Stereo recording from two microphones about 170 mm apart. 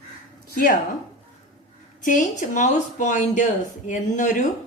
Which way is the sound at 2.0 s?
50° left (ahead or behind).